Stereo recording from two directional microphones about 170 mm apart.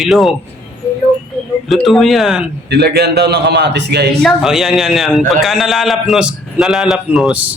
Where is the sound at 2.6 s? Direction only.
75° right (ahead or behind).